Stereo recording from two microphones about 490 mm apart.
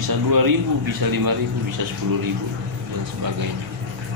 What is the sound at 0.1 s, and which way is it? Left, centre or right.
A man's voice, right.